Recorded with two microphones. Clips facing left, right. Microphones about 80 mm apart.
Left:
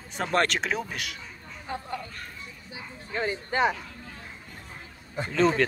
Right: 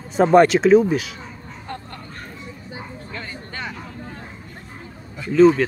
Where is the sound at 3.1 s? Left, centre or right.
Left.